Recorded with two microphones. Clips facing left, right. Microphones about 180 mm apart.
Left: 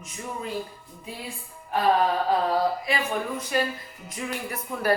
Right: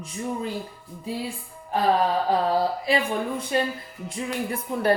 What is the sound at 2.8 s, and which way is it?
Speech, 30° right (ahead or behind).